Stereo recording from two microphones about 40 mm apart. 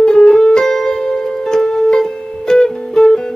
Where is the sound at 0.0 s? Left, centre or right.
Left.